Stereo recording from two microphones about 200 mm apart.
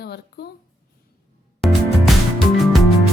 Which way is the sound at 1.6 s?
Centre (ahead or behind).